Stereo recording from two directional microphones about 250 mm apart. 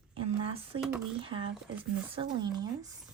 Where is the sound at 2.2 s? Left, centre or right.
Centre.